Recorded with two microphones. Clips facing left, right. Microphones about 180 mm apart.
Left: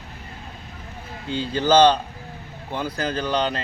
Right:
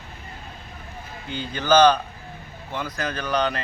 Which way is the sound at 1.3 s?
30° left (ahead or behind).